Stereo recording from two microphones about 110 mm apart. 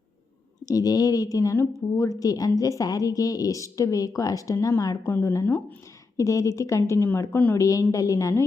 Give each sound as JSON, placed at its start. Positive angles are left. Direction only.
{"t": 0.6, "sound": "a woman's voice", "side_deg": 35}
{"t": 7.9, "sound": "a woman's voice", "side_deg": 30}